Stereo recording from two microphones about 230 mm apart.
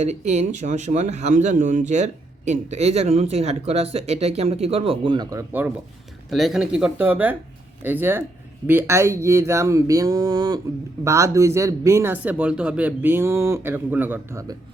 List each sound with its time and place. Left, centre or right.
0.0 s speech: right; by 14.5 s centre